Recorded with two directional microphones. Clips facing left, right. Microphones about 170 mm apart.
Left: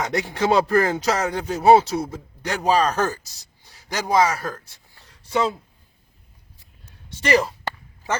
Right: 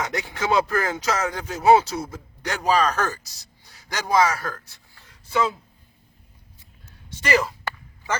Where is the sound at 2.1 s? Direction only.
10° left (ahead or behind).